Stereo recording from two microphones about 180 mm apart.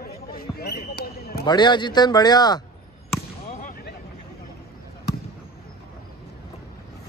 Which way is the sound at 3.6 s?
50° left (ahead or behind).